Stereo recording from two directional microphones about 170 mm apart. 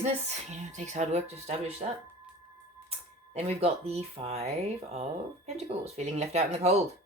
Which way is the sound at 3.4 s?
35° right (ahead or behind).